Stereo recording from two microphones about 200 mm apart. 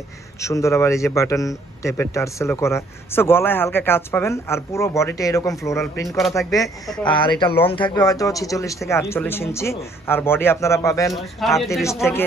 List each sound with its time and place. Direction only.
0.4 s a man's voice: 15° left (ahead or behind)
6.0 s speech: centre (ahead or behind)
6.3 s a man's voice: 15° left (ahead or behind)
11.1 s speech: centre (ahead or behind)